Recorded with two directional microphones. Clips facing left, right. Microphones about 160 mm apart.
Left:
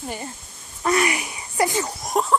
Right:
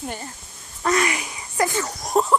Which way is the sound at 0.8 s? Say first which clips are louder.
Left 1 dB; 20° left (ahead or behind).